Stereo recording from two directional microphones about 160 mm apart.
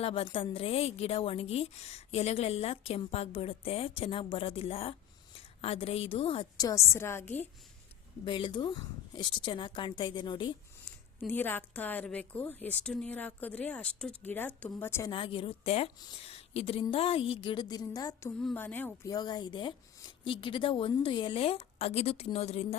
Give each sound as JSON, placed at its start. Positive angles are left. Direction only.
{"t": 0.0, "sound": "a woman's voice", "side_deg": 35}
{"t": 8.2, "sound": "a woman's voice", "side_deg": 30}
{"t": 11.3, "sound": "a woman's voice", "side_deg": 10}
{"t": 15.1, "sound": "a woman's voice", "side_deg": 35}
{"t": 18.3, "sound": "a woman's voice", "side_deg": 10}
{"t": 19.1, "sound": "a woman's voice", "side_deg": 25}